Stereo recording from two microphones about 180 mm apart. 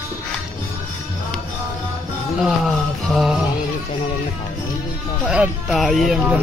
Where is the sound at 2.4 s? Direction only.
Centre (ahead or behind).